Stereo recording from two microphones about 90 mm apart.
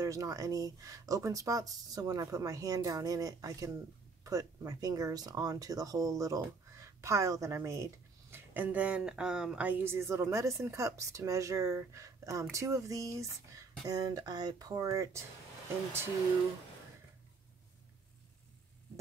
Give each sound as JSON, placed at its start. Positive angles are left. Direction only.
{"t": 0.0, "sound": "speech", "side_deg": -35}
{"t": 8.5, "sound": "speech", "side_deg": -15}
{"t": 9.7, "sound": "speech", "side_deg": -20}